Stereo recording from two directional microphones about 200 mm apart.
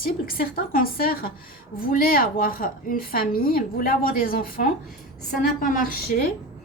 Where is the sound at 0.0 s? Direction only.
45° left (ahead or behind).